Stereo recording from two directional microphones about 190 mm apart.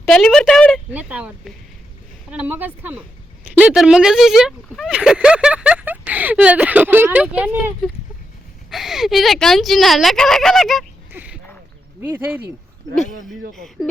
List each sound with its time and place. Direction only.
0.0 s speech: centre (ahead or behind)
0.9 s speech: 5° right (ahead or behind)
11.1 s a sound: 10° right (ahead or behind)
12.0 s speech: 10° right (ahead or behind)
13.5 s speech: centre (ahead or behind)